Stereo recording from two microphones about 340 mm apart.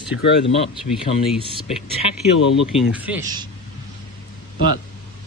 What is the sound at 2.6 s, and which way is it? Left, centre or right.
Speech, centre.